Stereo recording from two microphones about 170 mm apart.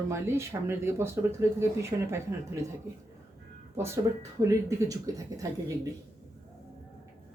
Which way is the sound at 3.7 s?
15° right (ahead or behind).